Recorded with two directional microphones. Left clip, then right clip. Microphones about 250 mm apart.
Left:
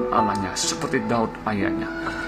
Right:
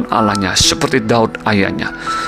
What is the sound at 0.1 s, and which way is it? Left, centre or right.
Speech, right.